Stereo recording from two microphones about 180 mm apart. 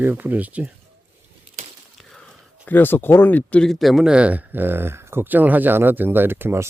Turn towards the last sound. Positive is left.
turn(degrees=-15)  # may be behind; listen again after turning